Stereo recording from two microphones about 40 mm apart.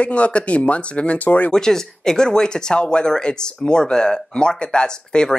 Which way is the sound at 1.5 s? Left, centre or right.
Centre.